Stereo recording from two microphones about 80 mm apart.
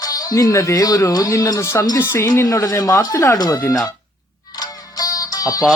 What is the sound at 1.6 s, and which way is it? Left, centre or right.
Speech, left.